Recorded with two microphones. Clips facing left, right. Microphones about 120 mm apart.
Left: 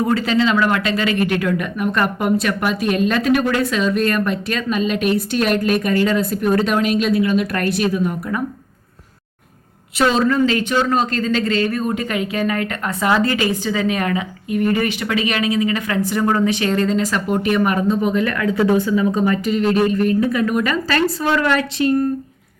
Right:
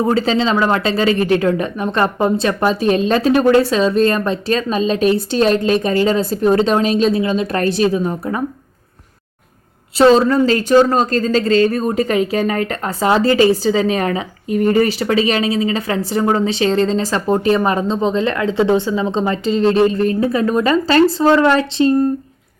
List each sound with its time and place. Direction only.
0.0 s speech: 30° right (ahead or behind)
10.0 s speech: 30° right (ahead or behind)